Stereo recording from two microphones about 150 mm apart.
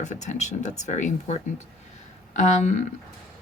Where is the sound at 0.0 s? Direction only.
50° left (ahead or behind).